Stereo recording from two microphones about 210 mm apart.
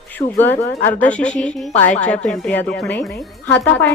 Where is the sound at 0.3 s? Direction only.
10° left (ahead or behind).